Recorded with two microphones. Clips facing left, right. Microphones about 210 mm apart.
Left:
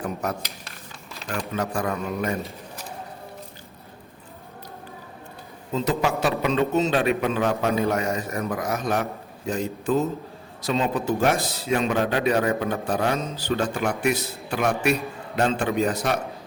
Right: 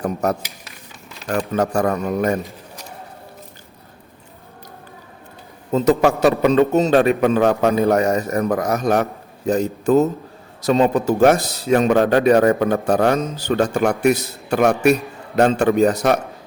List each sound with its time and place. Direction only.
0.0 s speech: 40° right (ahead or behind)
1.5 s a man's voice: 45° right (ahead or behind)
6.0 s a man's voice: 45° right (ahead or behind)